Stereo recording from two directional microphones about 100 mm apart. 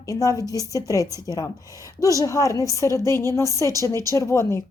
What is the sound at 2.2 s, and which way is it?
A woman's voice, 30° left (ahead or behind).